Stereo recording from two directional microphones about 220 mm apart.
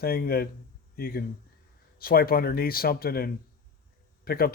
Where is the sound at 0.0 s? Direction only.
45° left (ahead or behind).